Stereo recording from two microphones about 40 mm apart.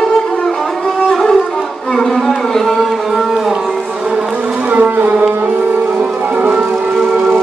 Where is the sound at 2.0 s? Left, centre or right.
Centre.